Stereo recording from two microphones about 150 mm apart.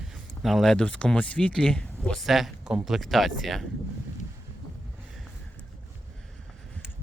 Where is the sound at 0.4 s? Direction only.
Centre (ahead or behind).